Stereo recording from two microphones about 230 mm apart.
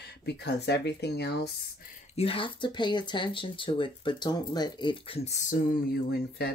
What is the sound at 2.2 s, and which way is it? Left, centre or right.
Speech, left.